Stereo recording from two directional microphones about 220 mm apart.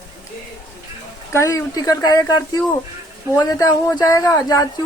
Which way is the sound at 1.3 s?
15° left (ahead or behind).